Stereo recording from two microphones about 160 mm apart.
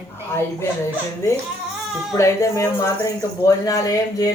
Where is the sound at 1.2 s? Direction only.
20° left (ahead or behind).